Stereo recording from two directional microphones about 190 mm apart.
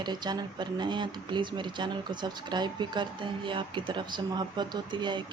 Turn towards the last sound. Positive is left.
turn(degrees=-25)  # may be behind; listen again after turning